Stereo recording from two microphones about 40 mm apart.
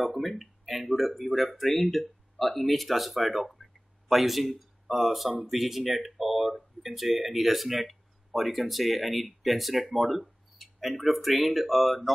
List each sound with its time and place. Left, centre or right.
0.0 s speech: centre